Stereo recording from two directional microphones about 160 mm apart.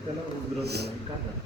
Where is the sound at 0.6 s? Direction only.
90° right.